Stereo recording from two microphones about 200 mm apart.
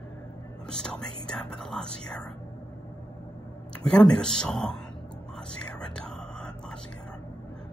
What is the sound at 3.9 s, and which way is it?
Speech, 5° left (ahead or behind).